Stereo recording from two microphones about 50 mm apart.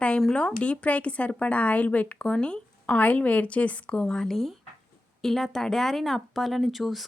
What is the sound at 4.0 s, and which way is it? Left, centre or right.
Speech, centre.